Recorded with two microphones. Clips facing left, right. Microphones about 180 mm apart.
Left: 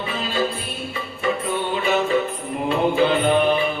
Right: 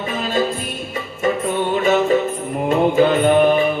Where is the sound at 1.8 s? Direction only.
45° right (ahead or behind).